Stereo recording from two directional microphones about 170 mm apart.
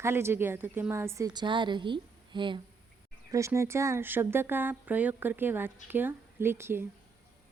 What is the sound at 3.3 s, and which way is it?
A woman's voice, 15° right (ahead or behind).